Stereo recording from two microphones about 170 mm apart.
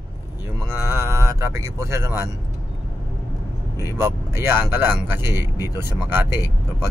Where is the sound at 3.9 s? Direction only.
15° right (ahead or behind).